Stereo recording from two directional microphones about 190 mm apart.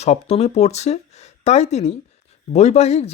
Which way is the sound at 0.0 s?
35° left (ahead or behind).